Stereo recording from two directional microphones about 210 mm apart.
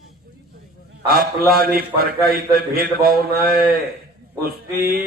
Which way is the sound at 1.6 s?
45° right (ahead or behind).